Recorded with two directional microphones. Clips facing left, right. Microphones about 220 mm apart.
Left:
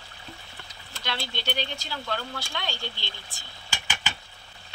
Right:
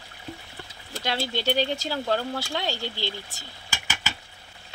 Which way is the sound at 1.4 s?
40° right (ahead or behind).